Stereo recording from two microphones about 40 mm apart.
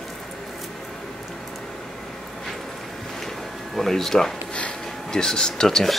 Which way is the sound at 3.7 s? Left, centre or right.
Centre.